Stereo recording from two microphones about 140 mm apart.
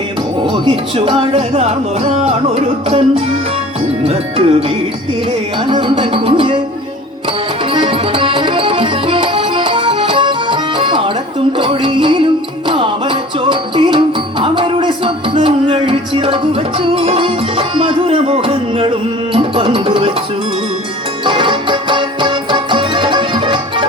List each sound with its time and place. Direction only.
0.5 s speech: 40° right (ahead or behind)
5.6 s music: 35° right (ahead or behind)
7.7 s music: 40° right (ahead or behind)
21.2 s music: 35° right (ahead or behind)